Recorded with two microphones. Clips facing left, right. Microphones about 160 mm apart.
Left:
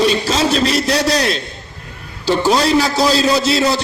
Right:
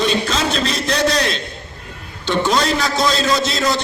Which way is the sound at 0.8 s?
35° left (ahead or behind).